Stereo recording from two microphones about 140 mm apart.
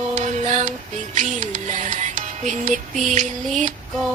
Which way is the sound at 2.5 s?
60° right (ahead or behind).